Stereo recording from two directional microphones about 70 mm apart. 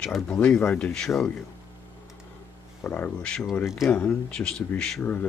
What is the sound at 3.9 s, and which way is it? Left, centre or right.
Speech, centre.